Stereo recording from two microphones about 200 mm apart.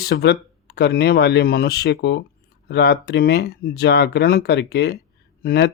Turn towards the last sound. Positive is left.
turn(degrees=50)  # may be behind; listen again after turning